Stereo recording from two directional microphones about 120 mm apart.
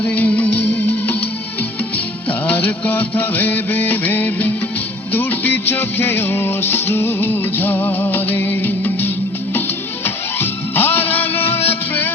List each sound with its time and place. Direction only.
0.0 s music: 10° left (ahead or behind)
2.5 s music: 15° left (ahead or behind)
10.4 s music: 20° left (ahead or behind)